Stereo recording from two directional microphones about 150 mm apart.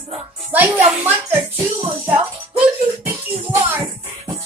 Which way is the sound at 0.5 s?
10° right (ahead or behind).